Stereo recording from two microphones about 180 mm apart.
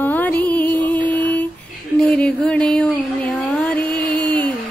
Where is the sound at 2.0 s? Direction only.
5° left (ahead or behind).